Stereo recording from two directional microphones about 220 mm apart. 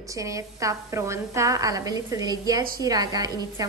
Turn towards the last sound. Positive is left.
turn(degrees=-15)  # may be behind; listen again after turning